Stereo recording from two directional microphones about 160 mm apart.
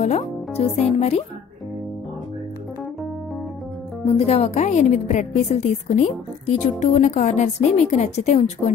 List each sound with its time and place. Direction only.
0.0 s music: 40° left (ahead or behind)
4.0 s a woman's voice: 40° left (ahead or behind)